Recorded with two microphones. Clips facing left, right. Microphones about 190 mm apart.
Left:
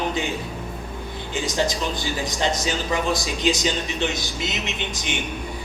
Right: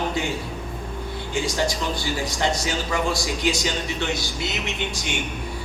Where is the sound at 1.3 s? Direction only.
20° left (ahead or behind).